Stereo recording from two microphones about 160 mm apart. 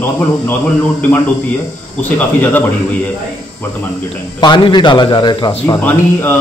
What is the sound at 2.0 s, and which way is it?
Speech, 10° left (ahead or behind).